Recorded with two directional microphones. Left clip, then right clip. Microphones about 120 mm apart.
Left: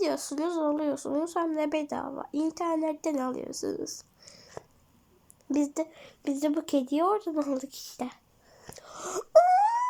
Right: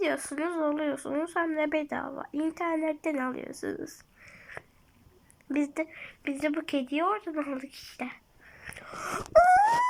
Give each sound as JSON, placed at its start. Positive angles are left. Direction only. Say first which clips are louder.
{"t": 0.0, "sound": "speech", "louder": "even", "side_deg": 15}
{"t": 8.6, "sound": "wail", "louder": "right 3 dB", "side_deg": 25}
{"t": 9.4, "sound": "wail", "louder": "right 2 dB", "side_deg": 5}